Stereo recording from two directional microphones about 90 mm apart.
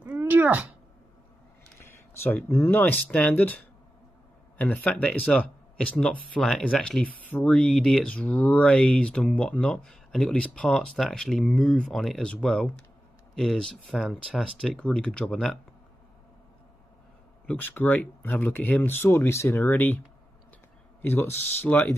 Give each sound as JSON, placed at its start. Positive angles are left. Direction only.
{"t": 0.2, "sound": "a sound", "side_deg": -20}
{"t": 1.8, "sound": "speech", "side_deg": 25}
{"t": 14.6, "sound": "speech", "side_deg": 10}
{"t": 17.5, "sound": "speech", "side_deg": 20}
{"t": 21.0, "sound": "speech", "side_deg": 25}